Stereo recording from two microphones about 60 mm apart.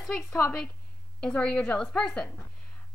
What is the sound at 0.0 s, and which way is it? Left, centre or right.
Speech, centre.